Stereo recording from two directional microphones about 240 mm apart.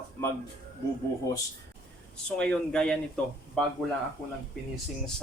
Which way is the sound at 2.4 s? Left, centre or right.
Centre.